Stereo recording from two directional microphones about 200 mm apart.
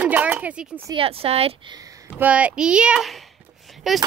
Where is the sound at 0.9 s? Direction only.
25° right (ahead or behind).